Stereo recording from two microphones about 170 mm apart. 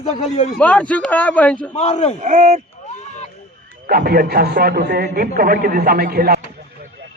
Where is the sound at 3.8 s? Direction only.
60° right (ahead or behind).